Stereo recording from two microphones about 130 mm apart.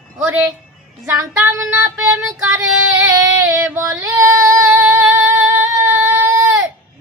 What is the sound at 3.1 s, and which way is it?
Female singing, 20° right (ahead or behind).